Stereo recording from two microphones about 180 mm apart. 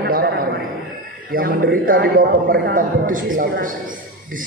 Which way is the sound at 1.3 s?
50° right (ahead or behind).